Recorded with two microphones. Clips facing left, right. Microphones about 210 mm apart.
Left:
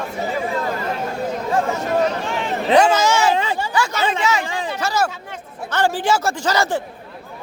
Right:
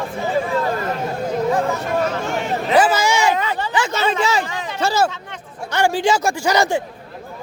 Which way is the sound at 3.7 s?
25° right (ahead or behind).